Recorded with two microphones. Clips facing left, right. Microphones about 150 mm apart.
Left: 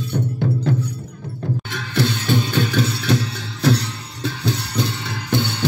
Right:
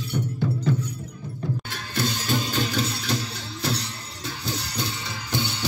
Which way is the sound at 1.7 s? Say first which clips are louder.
Left 10 dB; 60° left (ahead or behind).